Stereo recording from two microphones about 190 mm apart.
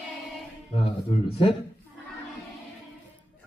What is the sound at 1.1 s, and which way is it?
Speech, 30° left (ahead or behind).